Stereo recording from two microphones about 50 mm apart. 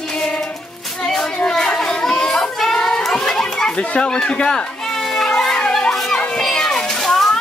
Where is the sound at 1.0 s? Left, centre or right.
Centre.